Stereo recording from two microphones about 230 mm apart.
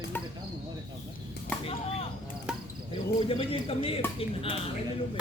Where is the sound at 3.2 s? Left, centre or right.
Left.